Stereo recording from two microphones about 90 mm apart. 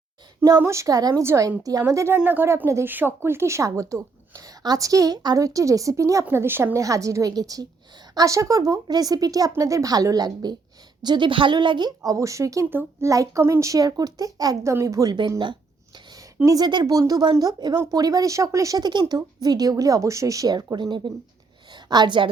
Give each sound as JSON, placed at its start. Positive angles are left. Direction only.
{"t": 0.6, "sound": "a woman's voice", "side_deg": -35}
{"t": 2.1, "sound": "a woman's voice", "side_deg": -20}
{"t": 6.2, "sound": "speech", "side_deg": -25}
{"t": 6.7, "sound": "a woman's voice", "side_deg": -40}
{"t": 11.0, "sound": "a woman's voice", "side_deg": -60}
{"t": 16.5, "sound": "speech", "side_deg": -50}
{"t": 16.8, "sound": "a woman's voice", "side_deg": -40}